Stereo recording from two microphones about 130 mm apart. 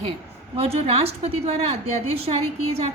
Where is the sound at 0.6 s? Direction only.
50° right (ahead or behind).